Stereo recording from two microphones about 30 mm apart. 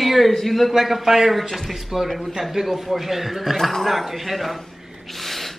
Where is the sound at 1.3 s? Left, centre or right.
Centre.